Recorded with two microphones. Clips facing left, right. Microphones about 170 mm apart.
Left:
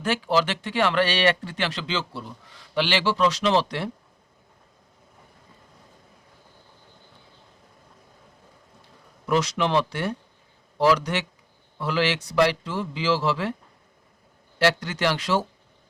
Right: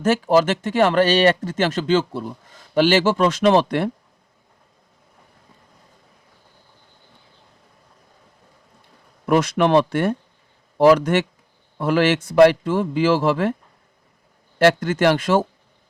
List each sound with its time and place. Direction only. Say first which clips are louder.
0.0 s speech: right 7 dB; 45° right (ahead or behind)
9.2 s speech: right 6 dB; 55° right (ahead or behind)
14.6 s speech: right 7 dB; 50° right (ahead or behind)